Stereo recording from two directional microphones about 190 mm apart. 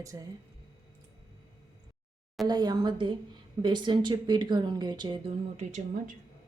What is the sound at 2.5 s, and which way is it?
A woman's voice, 20° right (ahead or behind).